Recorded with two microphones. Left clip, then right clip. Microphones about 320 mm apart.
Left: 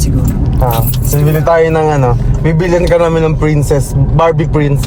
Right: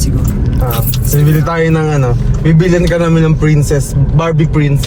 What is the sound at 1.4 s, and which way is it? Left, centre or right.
Speech, left.